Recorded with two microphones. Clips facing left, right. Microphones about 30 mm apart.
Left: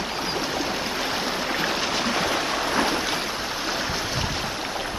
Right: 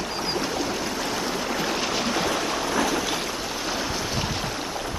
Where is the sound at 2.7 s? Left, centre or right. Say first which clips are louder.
Even; left.